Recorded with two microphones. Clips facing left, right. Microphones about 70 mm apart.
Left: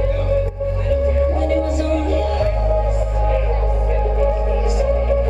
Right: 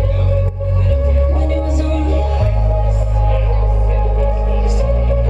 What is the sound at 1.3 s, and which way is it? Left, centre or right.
Music, centre.